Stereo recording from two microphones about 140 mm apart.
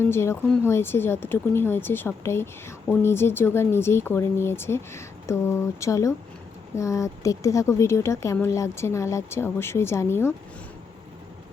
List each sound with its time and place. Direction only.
0.0 s a woman's voice: 20° left (ahead or behind)